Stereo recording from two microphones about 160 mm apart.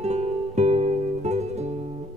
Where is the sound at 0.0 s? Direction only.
45° right (ahead or behind).